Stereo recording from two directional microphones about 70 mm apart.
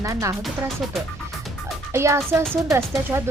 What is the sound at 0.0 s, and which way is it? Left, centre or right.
Speech, right.